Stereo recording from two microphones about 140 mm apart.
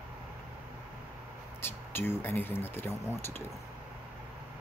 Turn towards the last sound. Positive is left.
turn(degrees=15)  # may be behind; listen again after turning